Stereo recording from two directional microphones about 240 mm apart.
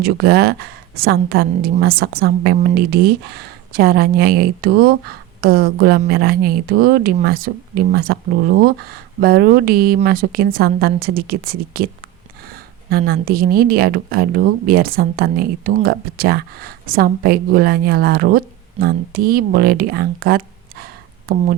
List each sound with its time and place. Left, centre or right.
0.0 s a woman's voice: right